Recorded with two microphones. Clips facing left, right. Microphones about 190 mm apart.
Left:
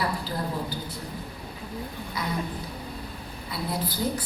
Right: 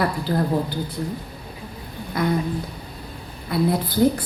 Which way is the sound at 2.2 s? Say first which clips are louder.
Right 10 dB; 55° right (ahead or behind).